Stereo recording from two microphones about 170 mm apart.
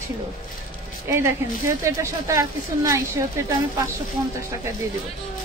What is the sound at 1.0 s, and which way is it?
A woman's voice, 15° right (ahead or behind).